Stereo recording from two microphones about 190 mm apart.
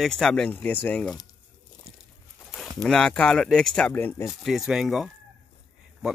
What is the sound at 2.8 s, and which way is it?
Speech, 5° left (ahead or behind).